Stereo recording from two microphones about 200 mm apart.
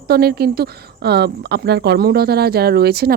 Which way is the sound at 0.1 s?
50° right (ahead or behind).